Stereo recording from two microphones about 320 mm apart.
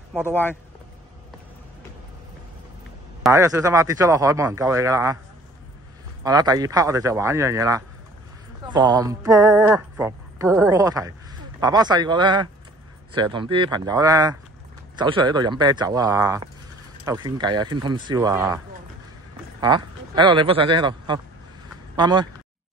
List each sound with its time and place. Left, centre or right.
0.1 s speech: centre
3.3 s speech: centre
6.2 s speech: centre
19.6 s speech: centre